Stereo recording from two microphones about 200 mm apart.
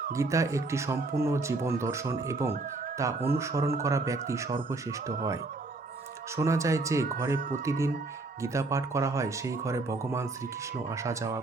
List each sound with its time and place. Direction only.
0.1 s a man's voice: 15° right (ahead or behind)